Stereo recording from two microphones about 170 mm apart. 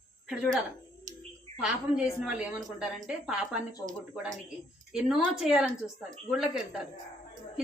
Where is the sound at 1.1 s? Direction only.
45° right (ahead or behind).